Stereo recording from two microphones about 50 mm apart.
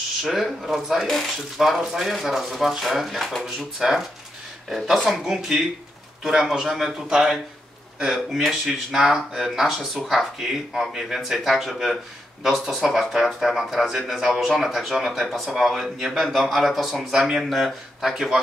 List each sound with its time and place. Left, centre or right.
0.2 s speech: centre
1.0 s speech: centre
1.3 s speech: centre
8.0 s speech: centre
15.2 s speech: centre